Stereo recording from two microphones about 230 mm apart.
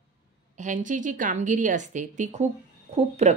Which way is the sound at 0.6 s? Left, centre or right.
Right.